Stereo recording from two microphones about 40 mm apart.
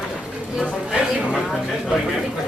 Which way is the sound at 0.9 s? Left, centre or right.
Centre.